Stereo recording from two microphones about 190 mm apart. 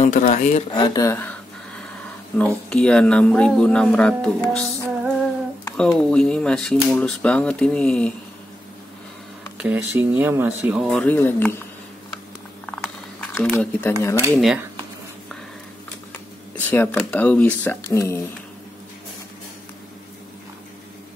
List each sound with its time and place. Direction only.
0.0 s speech: 40° left (ahead or behind)
0.7 s speech: 20° left (ahead or behind); by 4.6 s 5° left (ahead or behind)
5.8 s speech: 5° left (ahead or behind)
9.6 s speech: 10° right (ahead or behind); by 11.6 s 10° left (ahead or behind)
12.6 s a sound: 5° left (ahead or behind)
14.4 s speech: 5° right (ahead or behind)
16.1 s a sound: 10° left (ahead or behind)
16.9 s speech: 5° left (ahead or behind)